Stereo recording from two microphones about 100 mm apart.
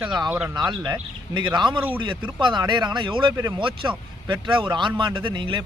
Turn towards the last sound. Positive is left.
turn(degrees=-50)  # may be behind; listen again after turning